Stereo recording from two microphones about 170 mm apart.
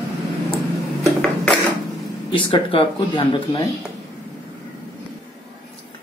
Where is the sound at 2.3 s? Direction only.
30° left (ahead or behind).